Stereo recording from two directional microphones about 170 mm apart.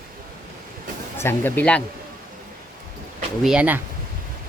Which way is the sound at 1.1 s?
15° left (ahead or behind).